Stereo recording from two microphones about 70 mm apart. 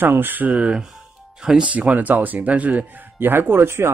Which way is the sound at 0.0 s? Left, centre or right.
Right.